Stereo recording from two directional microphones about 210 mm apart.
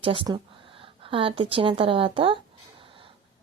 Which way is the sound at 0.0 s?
25° right (ahead or behind).